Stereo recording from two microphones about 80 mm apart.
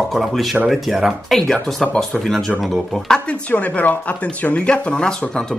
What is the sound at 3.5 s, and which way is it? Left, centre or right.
Speech, left.